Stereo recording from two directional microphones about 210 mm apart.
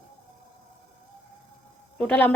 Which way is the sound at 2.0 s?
5° left (ahead or behind).